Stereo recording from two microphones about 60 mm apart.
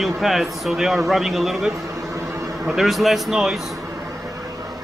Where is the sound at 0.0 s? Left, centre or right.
Centre.